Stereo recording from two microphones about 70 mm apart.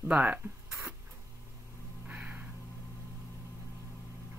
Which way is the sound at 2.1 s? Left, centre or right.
Right.